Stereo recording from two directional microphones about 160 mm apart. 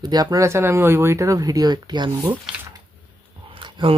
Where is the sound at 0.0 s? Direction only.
25° right (ahead or behind).